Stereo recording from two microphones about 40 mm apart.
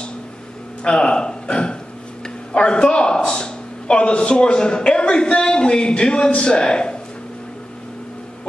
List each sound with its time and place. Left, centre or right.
0.8 s a man's voice: left
2.2 s a sound: left
3.3 s a man's voice: left